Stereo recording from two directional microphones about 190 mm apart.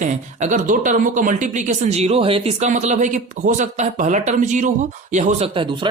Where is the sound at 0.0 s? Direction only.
40° right (ahead or behind).